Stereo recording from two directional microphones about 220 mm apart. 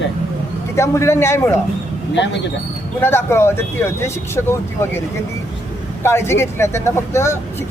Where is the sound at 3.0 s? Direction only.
10° left (ahead or behind).